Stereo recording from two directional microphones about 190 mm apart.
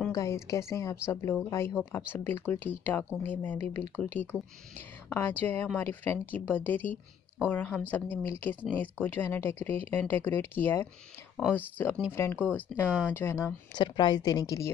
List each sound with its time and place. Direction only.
0.1 s a woman's voice: 15° left (ahead or behind)